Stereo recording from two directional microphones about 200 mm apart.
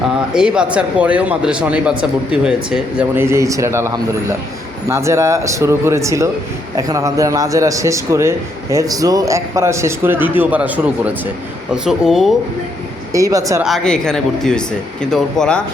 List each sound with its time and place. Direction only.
0.3 s a man's voice: 5° right (ahead or behind)
13.1 s a man's voice: 15° right (ahead or behind)
13.6 s speech: centre (ahead or behind)